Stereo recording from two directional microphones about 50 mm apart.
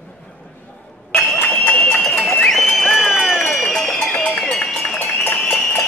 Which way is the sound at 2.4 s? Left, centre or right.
Centre.